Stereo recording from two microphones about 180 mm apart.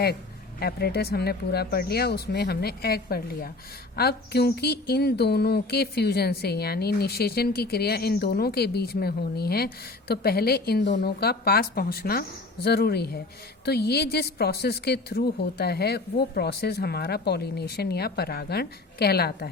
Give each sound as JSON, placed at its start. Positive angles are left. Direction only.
{"t": 0.6, "sound": "speech", "side_deg": 60}